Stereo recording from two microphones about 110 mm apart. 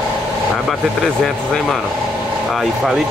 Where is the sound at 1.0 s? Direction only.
5° left (ahead or behind).